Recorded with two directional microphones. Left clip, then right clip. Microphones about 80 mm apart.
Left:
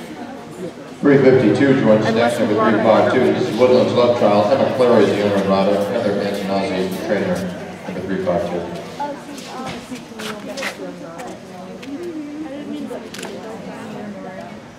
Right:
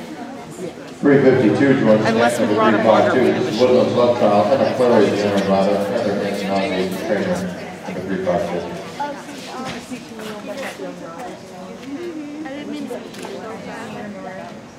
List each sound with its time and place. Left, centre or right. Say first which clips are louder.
1.0 s a man's voice: left 1 dB; centre
2.5 s a man's voice: even; right
2.9 s a man's voice: left 2 dB; centre
5.2 s a man's voice: left 1 dB; centre